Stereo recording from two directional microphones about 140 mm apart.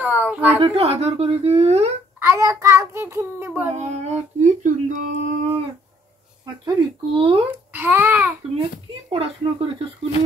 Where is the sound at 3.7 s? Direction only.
55° right (ahead or behind).